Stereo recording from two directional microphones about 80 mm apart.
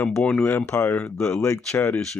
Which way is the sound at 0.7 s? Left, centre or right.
Left.